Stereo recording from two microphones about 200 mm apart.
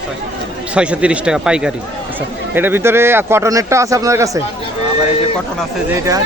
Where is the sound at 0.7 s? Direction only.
5° right (ahead or behind).